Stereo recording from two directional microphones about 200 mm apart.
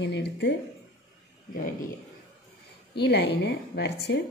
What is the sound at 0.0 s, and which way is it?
Speech, 60° left (ahead or behind).